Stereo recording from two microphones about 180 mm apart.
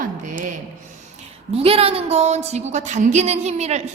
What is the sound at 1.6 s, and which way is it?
A woman's voice, 35° right (ahead or behind).